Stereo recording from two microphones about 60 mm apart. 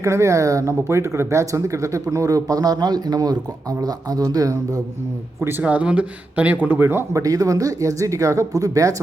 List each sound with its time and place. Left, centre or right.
0.0 s speech: right
5.4 s speech: right
5.6 s speech: right
7.1 s speech: right